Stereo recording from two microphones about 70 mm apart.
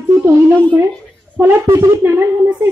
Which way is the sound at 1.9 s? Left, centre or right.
Right.